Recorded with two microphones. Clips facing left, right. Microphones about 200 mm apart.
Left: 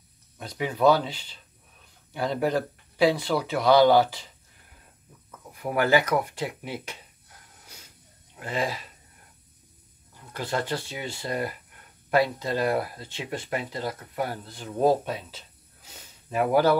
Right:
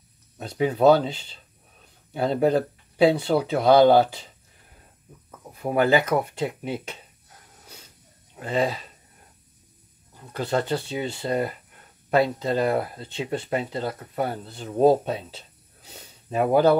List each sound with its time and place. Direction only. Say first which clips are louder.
0.7 s speech: right 4 dB; 25° right (ahead or behind)
2.1 s speech: right 5 dB; 25° right (ahead or behind)
5.3 s speech: right 3 dB; 25° right (ahead or behind)
7.6 s hiss: right 5 dB; 30° right (ahead or behind)
8.4 s speech: right 5 dB; 25° right (ahead or behind)
10.3 s speech: right 4 dB; 25° right (ahead or behind)
15.9 s sniff: right 2 dB; 30° right (ahead or behind)